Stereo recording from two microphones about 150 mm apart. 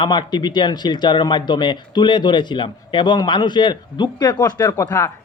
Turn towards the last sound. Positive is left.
turn(degrees=20)  # may be behind; listen again after turning